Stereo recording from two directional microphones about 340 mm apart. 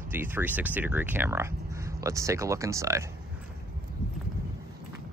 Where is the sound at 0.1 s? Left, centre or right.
Centre.